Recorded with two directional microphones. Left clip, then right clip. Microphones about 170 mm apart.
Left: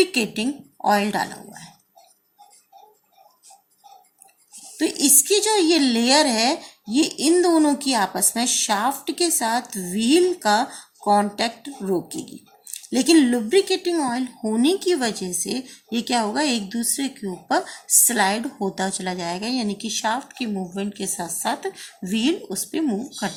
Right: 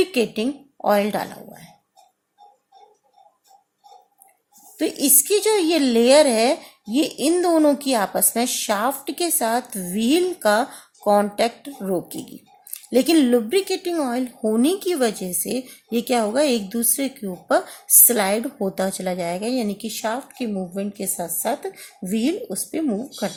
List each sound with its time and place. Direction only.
0.0 s speech: 50° right (ahead or behind)
4.8 s a woman's voice: 55° right (ahead or behind)